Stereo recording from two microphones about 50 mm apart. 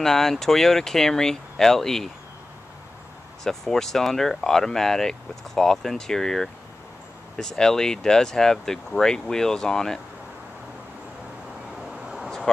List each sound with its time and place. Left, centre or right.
0.0 s speech: centre
3.4 s speech: centre
11.9 s a sound: centre